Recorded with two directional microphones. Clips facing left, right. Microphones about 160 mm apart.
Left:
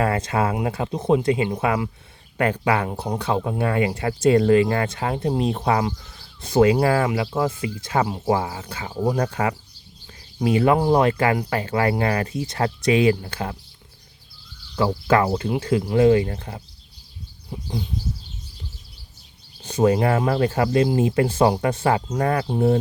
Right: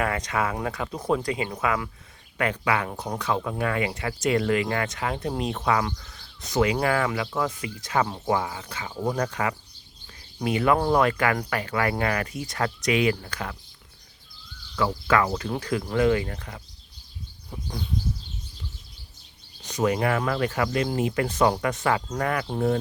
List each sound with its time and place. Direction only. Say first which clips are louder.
0.0 s speech: left 5 dB; 30° left (ahead or behind)
8.0 s speech: left 6 dB; 10° left (ahead or behind)
8.3 s speech: left 4 dB; 30° left (ahead or behind)
15.0 s speech: left 5 dB; 30° left (ahead or behind)
19.6 s speech: left 5 dB; 30° left (ahead or behind)